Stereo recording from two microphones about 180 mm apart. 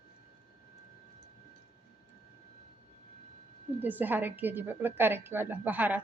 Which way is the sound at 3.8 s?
10° right (ahead or behind).